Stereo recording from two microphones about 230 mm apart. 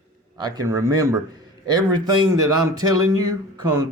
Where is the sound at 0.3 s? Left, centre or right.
Centre.